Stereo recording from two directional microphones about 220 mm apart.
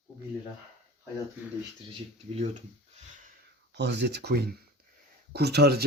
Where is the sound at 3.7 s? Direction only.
50° right (ahead or behind).